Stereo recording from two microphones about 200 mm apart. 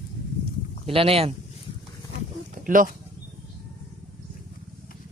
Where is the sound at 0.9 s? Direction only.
30° right (ahead or behind).